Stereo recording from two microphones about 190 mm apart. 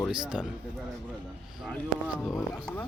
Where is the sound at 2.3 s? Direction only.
15° left (ahead or behind).